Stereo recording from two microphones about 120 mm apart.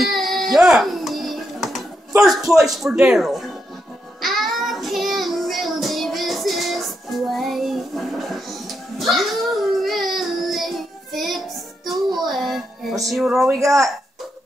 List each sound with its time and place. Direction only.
0.0 s music: centre (ahead or behind)
2.7 s speech: 5° right (ahead or behind)
4.2 s child singing: centre (ahead or behind)
13.5 s a woman's voice: 25° right (ahead or behind)